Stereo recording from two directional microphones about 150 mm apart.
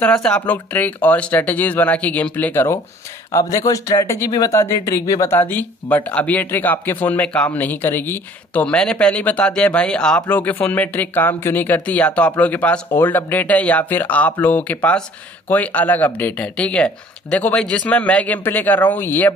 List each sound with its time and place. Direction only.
0.0 s speech: 5° left (ahead or behind)